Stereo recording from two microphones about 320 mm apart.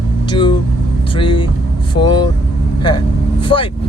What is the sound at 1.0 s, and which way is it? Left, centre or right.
Speech, centre.